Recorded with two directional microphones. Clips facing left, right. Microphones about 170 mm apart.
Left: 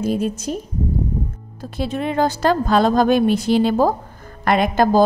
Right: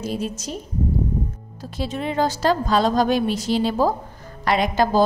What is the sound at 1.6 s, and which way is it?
A woman's voice, 55° left (ahead or behind).